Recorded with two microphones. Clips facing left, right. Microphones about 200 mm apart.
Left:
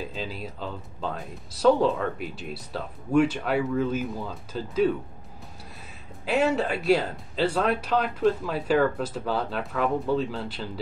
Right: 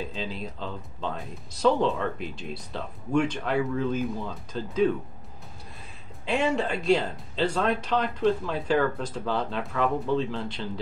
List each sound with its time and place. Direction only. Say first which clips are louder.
0.1 s speech: even; 5° left (ahead or behind)
6.2 s speech: left 2 dB; 5° left (ahead or behind)